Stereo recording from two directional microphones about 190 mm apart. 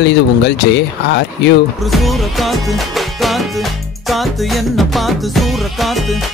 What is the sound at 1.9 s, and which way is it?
Music, centre (ahead or behind).